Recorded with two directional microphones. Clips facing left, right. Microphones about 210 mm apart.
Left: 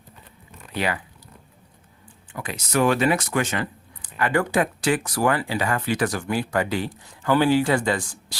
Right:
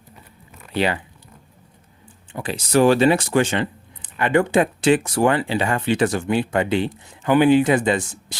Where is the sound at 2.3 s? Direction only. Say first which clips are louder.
Right 6 dB; 30° right (ahead or behind).